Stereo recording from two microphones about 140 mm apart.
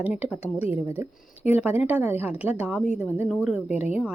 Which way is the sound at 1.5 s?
10° right (ahead or behind).